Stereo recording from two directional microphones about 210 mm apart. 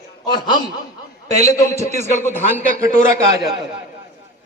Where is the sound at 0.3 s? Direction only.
20° left (ahead or behind).